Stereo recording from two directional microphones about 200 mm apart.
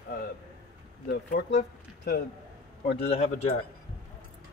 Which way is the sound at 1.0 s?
55° left (ahead or behind).